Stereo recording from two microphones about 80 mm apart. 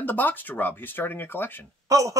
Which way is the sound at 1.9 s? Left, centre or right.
Right.